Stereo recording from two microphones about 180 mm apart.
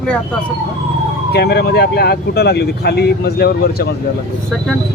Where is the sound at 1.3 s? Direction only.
60° left (ahead or behind).